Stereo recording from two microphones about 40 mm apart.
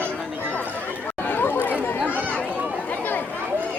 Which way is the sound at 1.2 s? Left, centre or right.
Left.